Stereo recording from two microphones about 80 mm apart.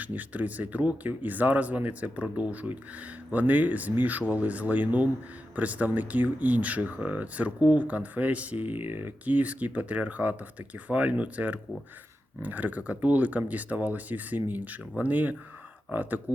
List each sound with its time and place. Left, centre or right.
0.0 s speech: centre